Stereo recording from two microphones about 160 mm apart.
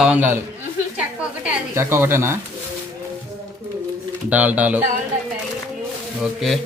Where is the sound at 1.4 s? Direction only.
15° right (ahead or behind).